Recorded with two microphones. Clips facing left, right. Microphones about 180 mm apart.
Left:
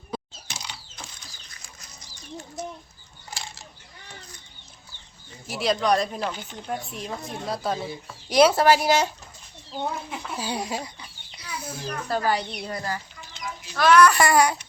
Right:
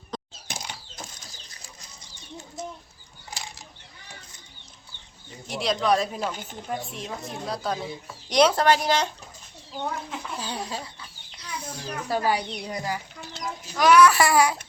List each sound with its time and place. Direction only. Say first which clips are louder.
0.4 s mechanisms: right 2 dB; 50° right (ahead or behind)
3.2 s a sound: even; 15° right (ahead or behind)
5.5 s a woman's voice: left 1 dB; centre (ahead or behind)
6.3 s speech: even; 45° right (ahead or behind)
6.7 s a woman's voice: left 1 dB; centre (ahead or behind)
11.9 s a woman's voice: even; 10° right (ahead or behind)